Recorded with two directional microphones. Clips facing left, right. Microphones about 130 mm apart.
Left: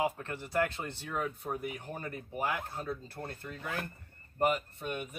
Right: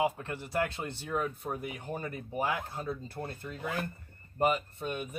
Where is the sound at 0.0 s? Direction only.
15° right (ahead or behind).